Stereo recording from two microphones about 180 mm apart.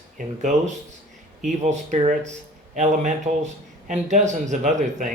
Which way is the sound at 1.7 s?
40° right (ahead or behind).